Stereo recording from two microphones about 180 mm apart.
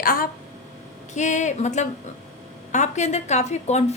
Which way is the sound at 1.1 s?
40° left (ahead or behind).